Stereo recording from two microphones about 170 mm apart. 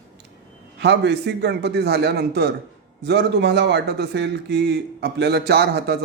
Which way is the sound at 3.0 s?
90° right.